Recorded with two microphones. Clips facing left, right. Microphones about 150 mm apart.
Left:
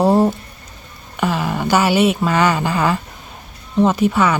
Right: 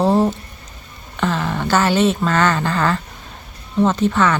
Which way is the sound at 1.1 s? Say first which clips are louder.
Left 1 dB; 10° left (ahead or behind).